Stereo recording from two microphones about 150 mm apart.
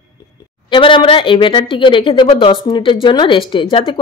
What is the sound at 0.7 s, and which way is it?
Speech, 35° left (ahead or behind).